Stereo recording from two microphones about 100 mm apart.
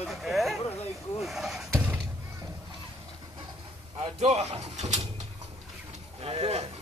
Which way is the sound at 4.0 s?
85° right.